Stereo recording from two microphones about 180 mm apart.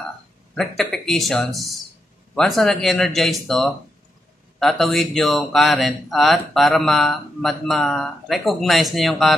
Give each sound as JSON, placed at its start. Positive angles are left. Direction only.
{"t": 0.6, "sound": "speech", "side_deg": 0}